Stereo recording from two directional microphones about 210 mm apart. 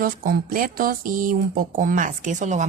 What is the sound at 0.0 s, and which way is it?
A woman's voice, 45° right (ahead or behind).